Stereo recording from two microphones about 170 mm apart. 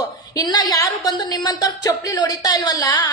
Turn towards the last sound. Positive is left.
turn(degrees=20)  # may be behind; listen again after turning